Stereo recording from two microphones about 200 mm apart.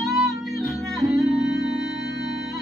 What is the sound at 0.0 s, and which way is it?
Music, centre (ahead or behind).